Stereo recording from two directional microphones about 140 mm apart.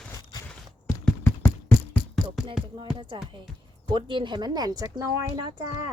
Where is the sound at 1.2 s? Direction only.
10° left (ahead or behind).